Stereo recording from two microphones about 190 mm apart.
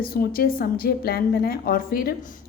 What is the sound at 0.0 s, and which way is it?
A woman's voice, 50° left (ahead or behind).